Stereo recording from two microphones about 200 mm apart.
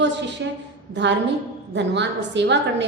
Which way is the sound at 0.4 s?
60° right (ahead or behind).